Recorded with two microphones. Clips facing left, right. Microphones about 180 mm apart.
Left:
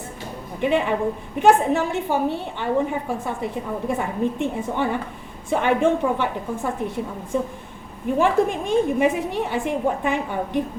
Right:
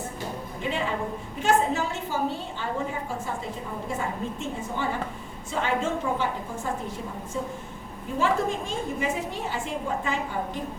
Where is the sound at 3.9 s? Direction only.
60° left (ahead or behind).